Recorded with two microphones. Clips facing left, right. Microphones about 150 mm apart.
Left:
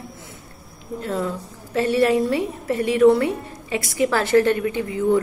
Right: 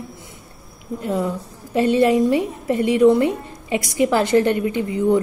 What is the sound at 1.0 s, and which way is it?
A woman's voice, 15° right (ahead or behind).